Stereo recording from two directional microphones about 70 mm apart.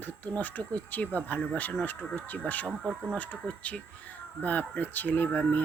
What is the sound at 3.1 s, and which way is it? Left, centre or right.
Speech, centre.